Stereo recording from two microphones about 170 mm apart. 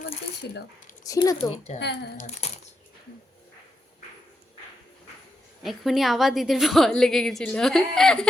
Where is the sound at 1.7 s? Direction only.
85° left.